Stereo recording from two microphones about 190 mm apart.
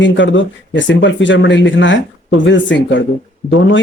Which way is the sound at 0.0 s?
75° left (ahead or behind).